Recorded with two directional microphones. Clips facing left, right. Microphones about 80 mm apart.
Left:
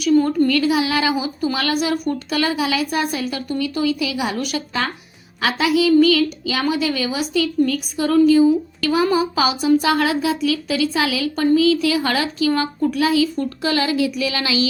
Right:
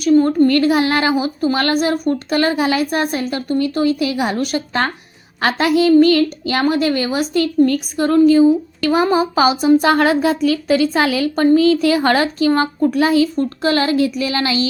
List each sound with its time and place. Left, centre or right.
0.0 s a woman's voice: right